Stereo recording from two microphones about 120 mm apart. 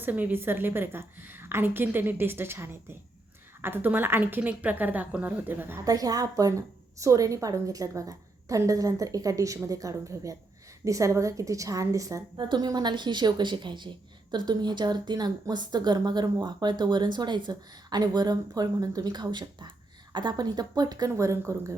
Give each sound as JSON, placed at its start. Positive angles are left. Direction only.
{"t": 0.0, "sound": "a woman's voice", "side_deg": -15}
{"t": 5.8, "sound": "a woman's voice", "side_deg": -30}